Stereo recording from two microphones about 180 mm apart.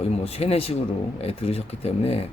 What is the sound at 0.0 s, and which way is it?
Speech, 35° left (ahead or behind).